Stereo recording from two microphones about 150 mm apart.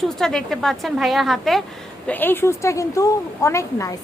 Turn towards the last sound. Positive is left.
turn(degrees=20)  # may be behind; listen again after turning